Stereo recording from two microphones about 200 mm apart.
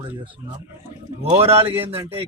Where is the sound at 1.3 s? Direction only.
30° right (ahead or behind).